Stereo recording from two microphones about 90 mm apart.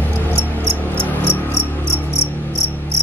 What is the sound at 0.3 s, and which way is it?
Cricket, 30° right (ahead or behind).